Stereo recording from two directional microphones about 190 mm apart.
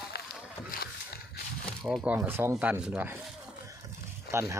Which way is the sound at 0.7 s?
55° left (ahead or behind).